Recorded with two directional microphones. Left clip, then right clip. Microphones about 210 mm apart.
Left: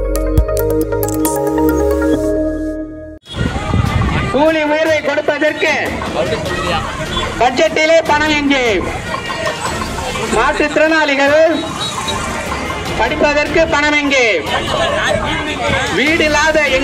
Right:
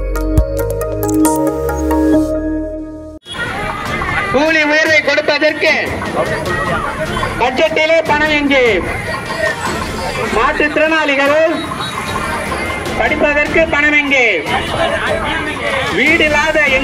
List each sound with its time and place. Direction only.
4.4 s a man's voice: 35° left (ahead or behind)
7.3 s a man's voice: 50° left (ahead or behind)
10.3 s a man's voice: 45° left (ahead or behind)
13.0 s speech: 30° left (ahead or behind)
13.7 s a man's voice: 40° left (ahead or behind)
16.0 s a man's voice: 30° left (ahead or behind)